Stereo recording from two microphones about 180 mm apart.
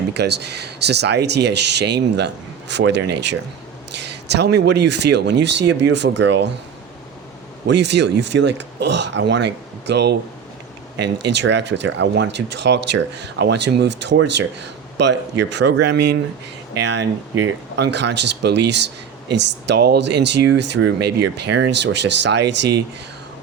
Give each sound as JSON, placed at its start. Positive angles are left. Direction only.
{"t": 0.1, "sound": "speech", "side_deg": -70}
{"t": 7.7, "sound": "speech", "side_deg": -70}